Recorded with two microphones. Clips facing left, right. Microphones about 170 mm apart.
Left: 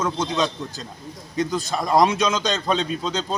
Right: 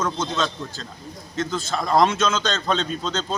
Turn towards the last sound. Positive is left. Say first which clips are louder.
# left 1 dB
turn(degrees=10)  # may be behind; listen again after turning